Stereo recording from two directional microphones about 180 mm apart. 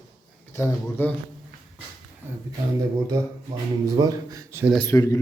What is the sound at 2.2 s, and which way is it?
A man's voice, 10° right (ahead or behind).